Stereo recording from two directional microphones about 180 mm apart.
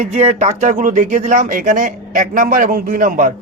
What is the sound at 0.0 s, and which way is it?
Speech, 40° right (ahead or behind).